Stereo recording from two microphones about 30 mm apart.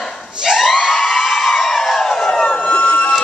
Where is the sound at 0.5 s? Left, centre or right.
Centre.